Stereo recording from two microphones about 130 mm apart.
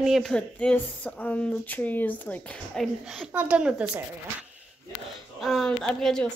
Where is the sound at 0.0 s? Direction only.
Centre (ahead or behind).